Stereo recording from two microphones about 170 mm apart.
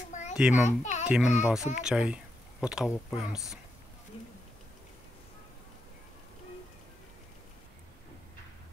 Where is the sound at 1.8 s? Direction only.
5° right (ahead or behind).